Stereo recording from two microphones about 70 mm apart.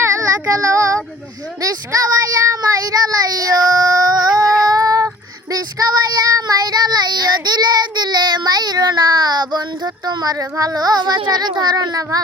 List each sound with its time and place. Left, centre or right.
0.0 s child singing: right
4.7 s child singing: right